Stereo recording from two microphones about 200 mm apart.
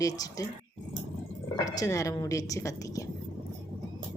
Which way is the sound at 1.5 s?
15° left (ahead or behind).